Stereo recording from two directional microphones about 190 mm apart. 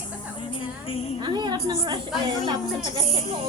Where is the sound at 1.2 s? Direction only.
20° right (ahead or behind).